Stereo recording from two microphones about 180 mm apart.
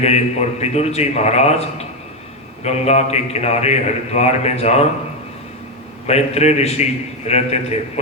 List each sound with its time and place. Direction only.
0.0 s a man's voice: 35° left (ahead or behind)
6.1 s a man's voice: 35° left (ahead or behind)